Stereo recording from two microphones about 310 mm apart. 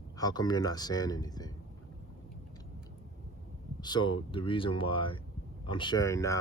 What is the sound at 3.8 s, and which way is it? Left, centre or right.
Speech, centre.